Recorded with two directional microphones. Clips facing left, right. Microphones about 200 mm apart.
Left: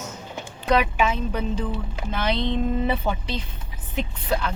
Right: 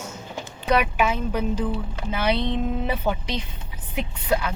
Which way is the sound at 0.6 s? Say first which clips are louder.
Even; 5° right (ahead or behind).